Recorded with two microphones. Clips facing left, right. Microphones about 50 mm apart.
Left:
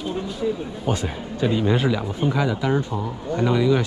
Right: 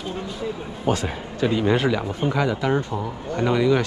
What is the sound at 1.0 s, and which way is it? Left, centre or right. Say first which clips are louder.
Speech: even; right.